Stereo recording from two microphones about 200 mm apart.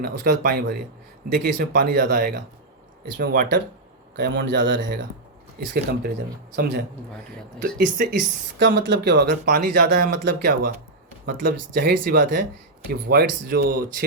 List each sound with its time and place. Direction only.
0.0 s speech: 45° right (ahead or behind)
7.8 s speech: 45° right (ahead or behind)
8.5 s speech: 60° right (ahead or behind)
9.5 s speech: 45° right (ahead or behind)